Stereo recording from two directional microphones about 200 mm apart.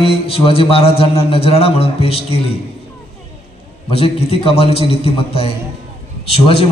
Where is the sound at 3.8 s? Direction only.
30° left (ahead or behind).